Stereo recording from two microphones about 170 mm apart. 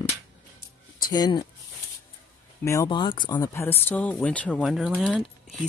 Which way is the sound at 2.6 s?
20° left (ahead or behind).